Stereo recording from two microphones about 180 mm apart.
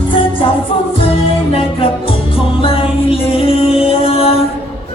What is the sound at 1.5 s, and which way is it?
Music, 30° left (ahead or behind).